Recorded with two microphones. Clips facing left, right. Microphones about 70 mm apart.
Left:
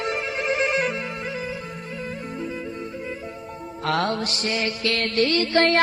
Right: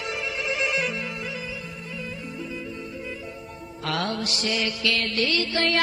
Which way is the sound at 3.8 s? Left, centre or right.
Left.